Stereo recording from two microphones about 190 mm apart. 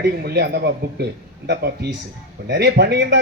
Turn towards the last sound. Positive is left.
turn(degrees=-60)  # may be behind; listen again after turning